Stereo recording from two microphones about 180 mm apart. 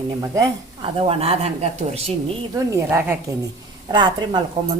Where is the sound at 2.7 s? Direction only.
15° right (ahead or behind).